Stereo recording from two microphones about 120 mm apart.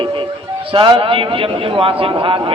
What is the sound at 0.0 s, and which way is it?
Music, 45° right (ahead or behind).